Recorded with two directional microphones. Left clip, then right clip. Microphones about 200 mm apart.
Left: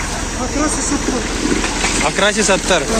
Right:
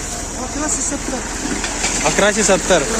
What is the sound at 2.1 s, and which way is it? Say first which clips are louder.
Speech: right 1 dB; 10° right (ahead or behind).